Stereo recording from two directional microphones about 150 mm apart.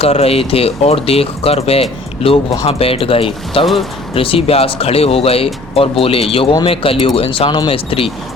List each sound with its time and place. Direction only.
0.0 s speech: 40° left (ahead or behind)